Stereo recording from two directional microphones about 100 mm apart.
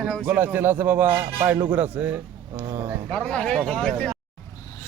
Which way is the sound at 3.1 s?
10° left (ahead or behind).